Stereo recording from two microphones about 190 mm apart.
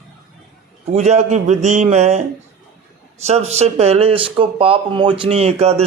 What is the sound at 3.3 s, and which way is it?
Speech, 35° right (ahead or behind).